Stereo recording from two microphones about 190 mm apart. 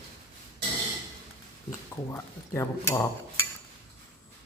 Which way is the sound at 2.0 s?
15° left (ahead or behind).